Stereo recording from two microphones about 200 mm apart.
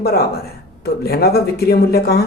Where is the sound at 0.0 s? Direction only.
50° left (ahead or behind).